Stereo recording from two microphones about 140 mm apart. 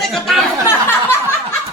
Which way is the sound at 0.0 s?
Centre (ahead or behind).